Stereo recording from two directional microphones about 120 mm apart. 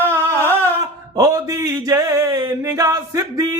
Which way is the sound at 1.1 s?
30° right (ahead or behind).